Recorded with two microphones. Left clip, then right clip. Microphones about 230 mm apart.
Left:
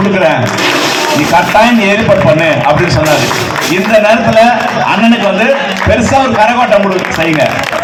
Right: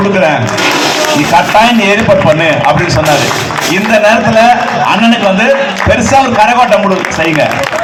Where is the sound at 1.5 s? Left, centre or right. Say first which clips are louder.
Even; right.